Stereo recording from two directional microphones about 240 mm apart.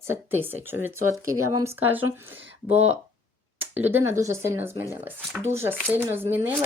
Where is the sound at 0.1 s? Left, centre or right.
Centre.